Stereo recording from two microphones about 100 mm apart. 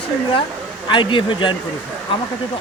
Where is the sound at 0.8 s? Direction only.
55° left (ahead or behind).